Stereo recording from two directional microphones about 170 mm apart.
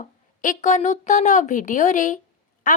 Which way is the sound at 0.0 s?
45° left (ahead or behind).